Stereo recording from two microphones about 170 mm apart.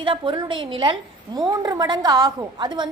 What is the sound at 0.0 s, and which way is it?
A woman's voice, 30° right (ahead or behind).